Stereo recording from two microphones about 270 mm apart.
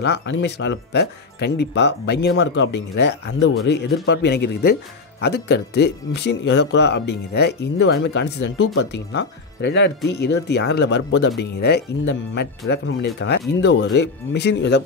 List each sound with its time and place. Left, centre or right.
0.0 s speech: left